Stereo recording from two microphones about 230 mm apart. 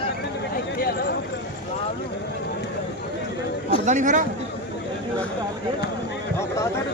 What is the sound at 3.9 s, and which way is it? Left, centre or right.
Speech, right.